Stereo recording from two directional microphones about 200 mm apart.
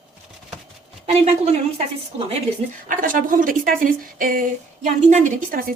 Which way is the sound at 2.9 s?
45° right (ahead or behind).